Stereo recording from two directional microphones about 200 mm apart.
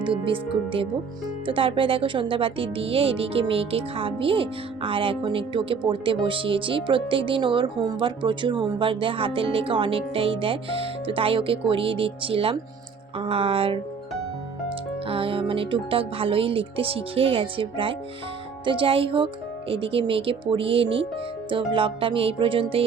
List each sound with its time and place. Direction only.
0.0 s speech: 25° right (ahead or behind)
15.0 s speech: 25° right (ahead or behind)